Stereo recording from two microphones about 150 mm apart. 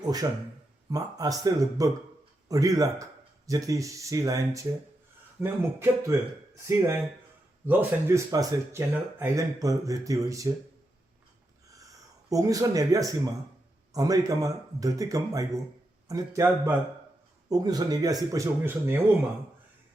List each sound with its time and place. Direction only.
0.0 s speech: 25° right (ahead or behind)
11.8 s speech: 25° right (ahead or behind)